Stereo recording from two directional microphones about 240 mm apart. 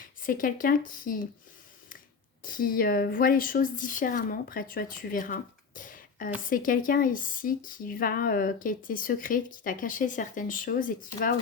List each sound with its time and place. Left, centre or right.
0.3 s speech: left
2.4 s speech: left